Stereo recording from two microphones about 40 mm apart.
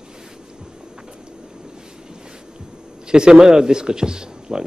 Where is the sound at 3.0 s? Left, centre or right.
Centre.